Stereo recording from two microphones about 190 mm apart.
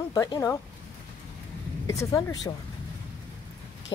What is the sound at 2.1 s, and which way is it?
Speech, 20° left (ahead or behind).